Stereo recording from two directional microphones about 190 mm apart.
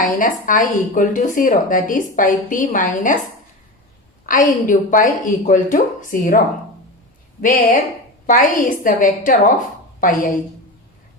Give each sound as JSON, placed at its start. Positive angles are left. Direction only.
{"t": 0.0, "sound": "a woman's voice", "side_deg": 45}
{"t": 4.3, "sound": "a woman's voice", "side_deg": 45}
{"t": 7.4, "sound": "a woman's voice", "side_deg": 45}